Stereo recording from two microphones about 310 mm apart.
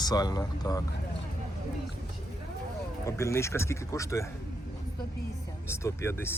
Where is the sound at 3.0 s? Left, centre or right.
Centre.